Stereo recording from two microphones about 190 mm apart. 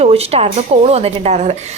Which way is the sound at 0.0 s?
30° right (ahead or behind).